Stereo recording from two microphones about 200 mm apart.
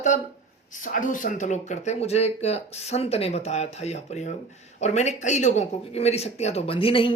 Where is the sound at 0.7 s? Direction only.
40° left (ahead or behind).